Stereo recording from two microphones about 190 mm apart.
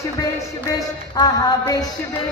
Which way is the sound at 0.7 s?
20° left (ahead or behind).